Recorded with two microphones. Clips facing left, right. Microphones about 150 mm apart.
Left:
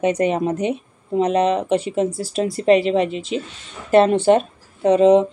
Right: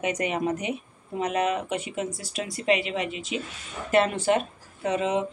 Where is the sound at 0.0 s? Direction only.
30° left (ahead or behind).